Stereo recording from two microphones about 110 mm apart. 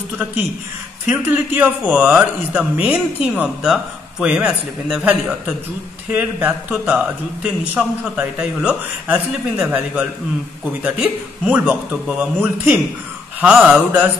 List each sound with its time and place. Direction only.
1.0 s a man's voice: 15° right (ahead or behind)
6.1 s a man's voice: 15° right (ahead or behind)
13.4 s a man's voice: 5° right (ahead or behind)